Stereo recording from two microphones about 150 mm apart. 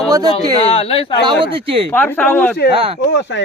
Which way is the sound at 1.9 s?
10° left (ahead or behind).